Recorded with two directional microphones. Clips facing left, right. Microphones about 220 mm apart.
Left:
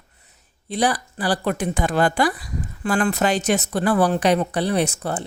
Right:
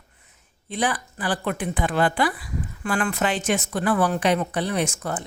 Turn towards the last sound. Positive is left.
turn(degrees=35)  # may be behind; listen again after turning